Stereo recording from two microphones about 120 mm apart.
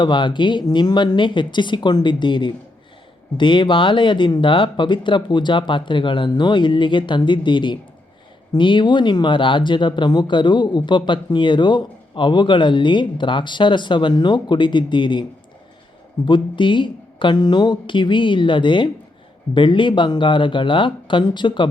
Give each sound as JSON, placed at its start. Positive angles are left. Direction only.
{"t": 0.0, "sound": "speech", "side_deg": 40}
{"t": 16.2, "sound": "a woman's voice", "side_deg": 45}